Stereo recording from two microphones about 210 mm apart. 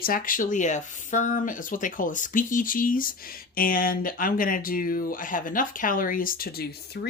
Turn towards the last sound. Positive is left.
turn(degrees=50)  # may be behind; listen again after turning